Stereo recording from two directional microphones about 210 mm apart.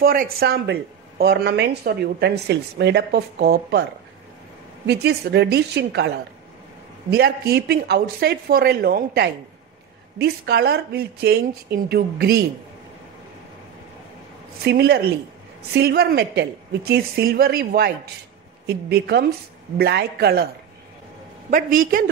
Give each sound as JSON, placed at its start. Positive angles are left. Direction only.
{"t": 0.0, "sound": "speech", "side_deg": -45}
{"t": 4.8, "sound": "speech", "side_deg": -50}
{"t": 14.6, "sound": "speech", "side_deg": -50}
{"t": 21.5, "sound": "a man's voice", "side_deg": -40}